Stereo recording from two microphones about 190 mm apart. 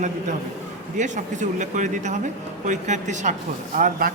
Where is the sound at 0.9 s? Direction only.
40° right (ahead or behind).